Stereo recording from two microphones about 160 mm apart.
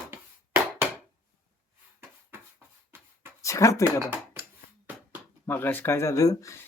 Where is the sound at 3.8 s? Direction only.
15° right (ahead or behind).